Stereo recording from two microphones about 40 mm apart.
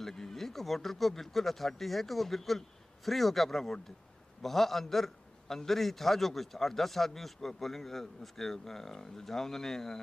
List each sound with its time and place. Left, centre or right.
0.0 s a man's voice: centre